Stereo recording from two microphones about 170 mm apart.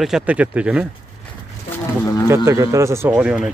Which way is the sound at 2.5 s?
15° right (ahead or behind).